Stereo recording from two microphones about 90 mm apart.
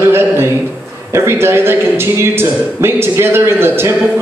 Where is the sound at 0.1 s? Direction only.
25° right (ahead or behind).